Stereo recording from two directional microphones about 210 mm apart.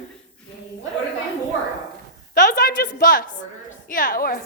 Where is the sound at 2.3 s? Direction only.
40° left (ahead or behind).